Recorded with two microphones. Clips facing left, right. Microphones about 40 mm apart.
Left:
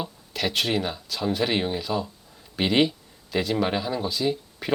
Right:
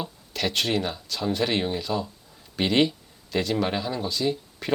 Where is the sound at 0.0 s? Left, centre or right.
Centre.